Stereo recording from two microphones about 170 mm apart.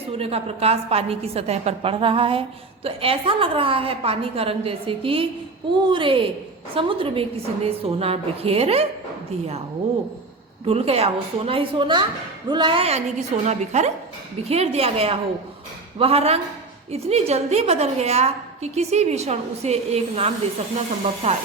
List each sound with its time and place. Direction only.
0.2 s a woman's voice: 35° right (ahead or behind)
10.7 s a woman's voice: 35° right (ahead or behind)